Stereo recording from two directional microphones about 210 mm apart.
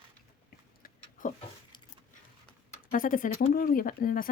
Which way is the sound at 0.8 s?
40° left (ahead or behind).